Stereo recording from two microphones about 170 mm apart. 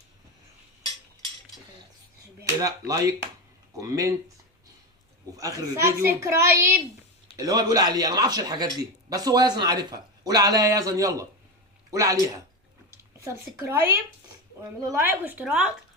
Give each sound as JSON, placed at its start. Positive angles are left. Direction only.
{"t": 2.4, "sound": "a man's voice", "side_deg": -20}
{"t": 5.4, "sound": "a child's voice", "side_deg": -20}
{"t": 13.1, "sound": "a child's voice", "side_deg": -15}
{"t": 15.2, "sound": "a child's voice", "side_deg": -5}